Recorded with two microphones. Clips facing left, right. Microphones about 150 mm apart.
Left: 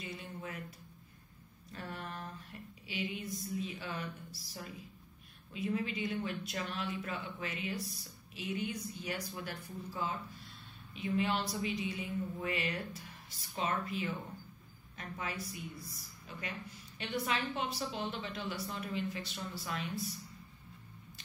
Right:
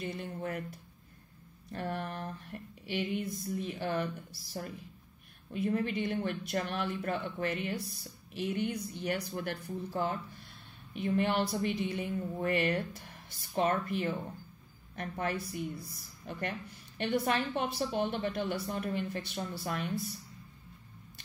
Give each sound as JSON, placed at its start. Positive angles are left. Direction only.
{"t": 0.0, "sound": "speech", "side_deg": -55}
{"t": 1.7, "sound": "a woman's voice", "side_deg": -60}